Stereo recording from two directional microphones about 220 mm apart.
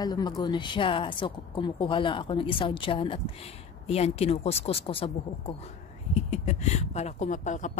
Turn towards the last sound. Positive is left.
turn(degrees=35)  # may be behind; listen again after turning